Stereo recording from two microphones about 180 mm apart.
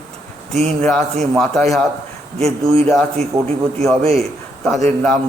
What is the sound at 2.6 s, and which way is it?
Speech, 30° right (ahead or behind).